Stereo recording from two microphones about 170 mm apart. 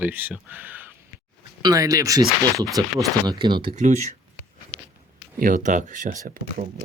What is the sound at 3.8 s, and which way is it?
Speech, 45° right (ahead or behind).